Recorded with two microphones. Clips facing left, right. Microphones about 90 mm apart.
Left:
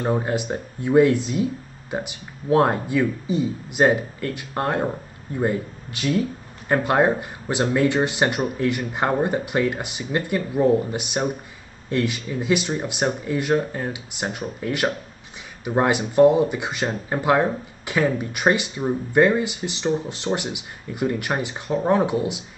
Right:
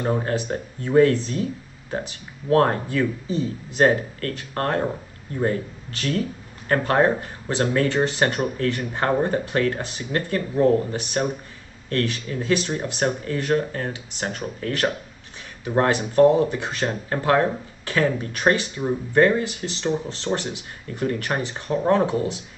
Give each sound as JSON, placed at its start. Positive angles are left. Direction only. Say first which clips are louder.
{"t": 0.0, "sound": "speech", "louder": "left 1 dB", "side_deg": 15}